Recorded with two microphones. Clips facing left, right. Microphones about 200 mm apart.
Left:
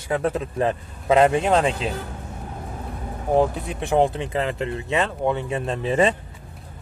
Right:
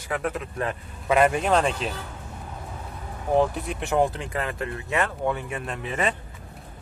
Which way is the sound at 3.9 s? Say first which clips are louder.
Left 4 dB; 20° left (ahead or behind).